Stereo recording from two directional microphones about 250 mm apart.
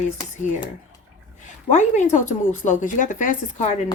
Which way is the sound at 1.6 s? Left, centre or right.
Left.